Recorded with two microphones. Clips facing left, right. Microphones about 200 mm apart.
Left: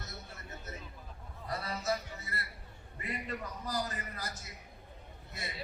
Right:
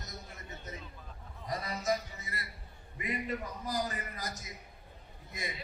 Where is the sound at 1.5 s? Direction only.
15° right (ahead or behind).